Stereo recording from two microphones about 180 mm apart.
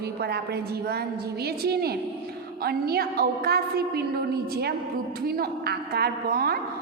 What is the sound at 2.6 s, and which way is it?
A woman's voice, 60° right (ahead or behind).